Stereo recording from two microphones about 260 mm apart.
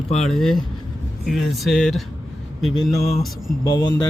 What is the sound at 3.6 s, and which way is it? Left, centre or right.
Speech, centre.